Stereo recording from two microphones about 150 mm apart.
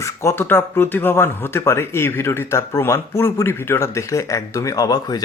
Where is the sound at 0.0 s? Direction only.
20° left (ahead or behind).